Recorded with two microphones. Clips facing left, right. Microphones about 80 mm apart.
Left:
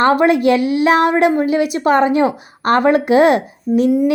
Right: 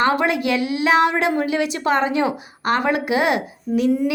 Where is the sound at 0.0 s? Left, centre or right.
Left.